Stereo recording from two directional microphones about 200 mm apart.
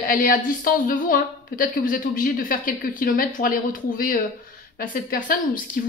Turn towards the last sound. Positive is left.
turn(degrees=45)  # may be behind; listen again after turning